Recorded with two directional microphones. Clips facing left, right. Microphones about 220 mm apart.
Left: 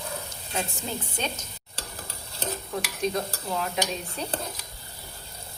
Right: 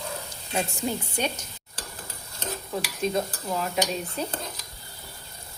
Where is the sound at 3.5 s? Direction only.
5° right (ahead or behind).